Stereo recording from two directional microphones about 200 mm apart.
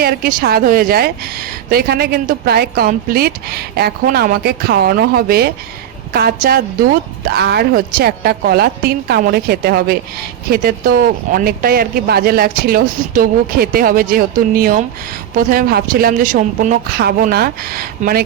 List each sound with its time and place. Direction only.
0.0 s a woman's voice: 45° right (ahead or behind)